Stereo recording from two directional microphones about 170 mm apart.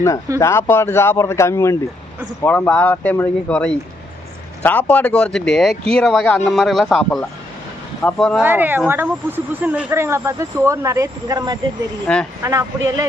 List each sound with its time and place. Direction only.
0.3 s speech: 15° left (ahead or behind)
8.4 s speech: 10° right (ahead or behind)